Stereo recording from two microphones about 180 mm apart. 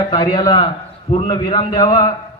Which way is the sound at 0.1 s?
20° left (ahead or behind).